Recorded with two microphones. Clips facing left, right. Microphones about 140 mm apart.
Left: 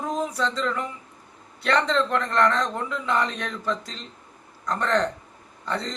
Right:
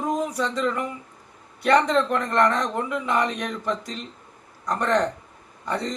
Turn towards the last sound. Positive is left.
turn(degrees=-15)  # may be behind; listen again after turning